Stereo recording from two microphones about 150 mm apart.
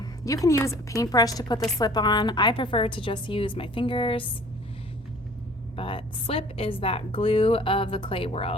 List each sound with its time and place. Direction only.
0.0 s a woman's voice: 25° left (ahead or behind)
5.7 s a woman's voice: 35° left (ahead or behind)